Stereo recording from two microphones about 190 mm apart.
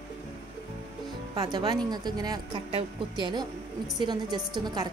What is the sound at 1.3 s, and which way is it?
Speech, 25° right (ahead or behind).